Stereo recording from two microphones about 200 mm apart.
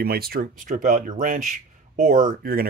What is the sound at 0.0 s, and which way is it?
Speech, 50° right (ahead or behind).